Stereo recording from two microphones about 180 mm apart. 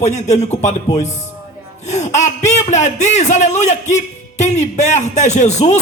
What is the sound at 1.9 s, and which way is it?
A man's voice, 40° left (ahead or behind).